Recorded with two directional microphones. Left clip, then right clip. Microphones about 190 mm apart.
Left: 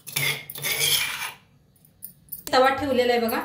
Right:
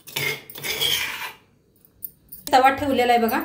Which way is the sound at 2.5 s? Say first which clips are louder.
Right 3 dB; 60° right (ahead or behind).